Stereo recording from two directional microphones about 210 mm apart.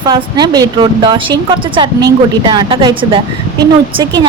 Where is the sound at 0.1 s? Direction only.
20° right (ahead or behind).